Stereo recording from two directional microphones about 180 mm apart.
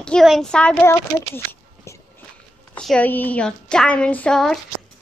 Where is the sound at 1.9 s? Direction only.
15° left (ahead or behind).